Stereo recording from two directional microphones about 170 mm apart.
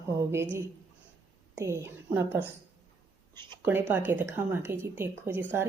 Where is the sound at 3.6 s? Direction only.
10° right (ahead or behind).